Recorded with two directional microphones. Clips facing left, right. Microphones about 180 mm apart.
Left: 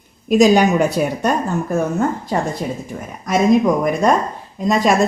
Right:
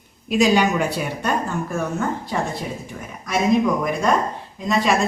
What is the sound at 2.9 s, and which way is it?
Speech, 35° left (ahead or behind).